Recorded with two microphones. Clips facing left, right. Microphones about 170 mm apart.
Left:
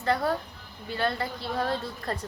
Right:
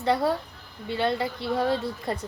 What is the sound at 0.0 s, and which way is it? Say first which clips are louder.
A woman's voice: right 3 dB; 20° right (ahead or behind).